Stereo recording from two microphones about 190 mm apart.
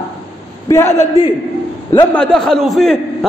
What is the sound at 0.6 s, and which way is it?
Speech, 15° left (ahead or behind).